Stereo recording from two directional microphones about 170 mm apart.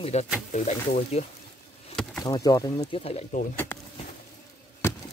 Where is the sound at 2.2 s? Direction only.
20° left (ahead or behind).